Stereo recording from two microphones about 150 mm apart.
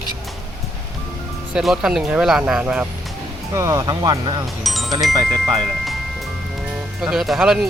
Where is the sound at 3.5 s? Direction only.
20° right (ahead or behind).